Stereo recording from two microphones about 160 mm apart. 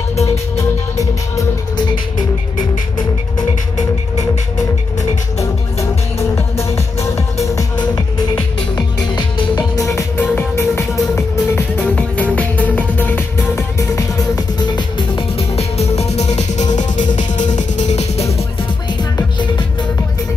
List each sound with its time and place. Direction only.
0.9 s music: 20° left (ahead or behind)
5.4 s music: 20° left (ahead or behind)
10.3 s music: 15° left (ahead or behind); by 18.2 s 45° left (ahead or behind)